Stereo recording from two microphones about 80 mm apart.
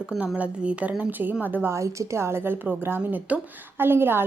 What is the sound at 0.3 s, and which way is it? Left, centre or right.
A woman's voice, centre.